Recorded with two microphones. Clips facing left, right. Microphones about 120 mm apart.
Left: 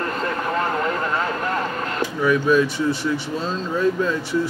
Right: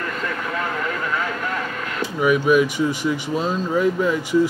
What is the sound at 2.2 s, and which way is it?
Speech, 15° right (ahead or behind).